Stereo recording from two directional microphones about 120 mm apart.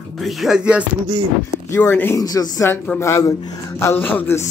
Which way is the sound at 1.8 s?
15° left (ahead or behind).